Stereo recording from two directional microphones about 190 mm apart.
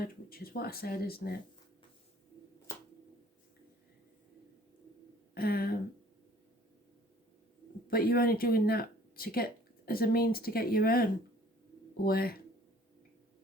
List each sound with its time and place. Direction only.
0.0 s speech: 50° left (ahead or behind)
5.3 s speech: 50° left (ahead or behind)
7.9 s speech: 50° left (ahead or behind)